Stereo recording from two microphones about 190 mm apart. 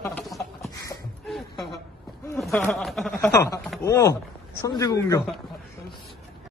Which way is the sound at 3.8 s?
15° left (ahead or behind).